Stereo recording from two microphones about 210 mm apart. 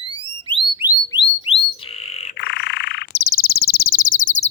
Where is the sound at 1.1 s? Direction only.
25° left (ahead or behind).